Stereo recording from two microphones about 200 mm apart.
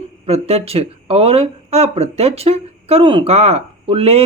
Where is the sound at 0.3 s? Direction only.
30° right (ahead or behind).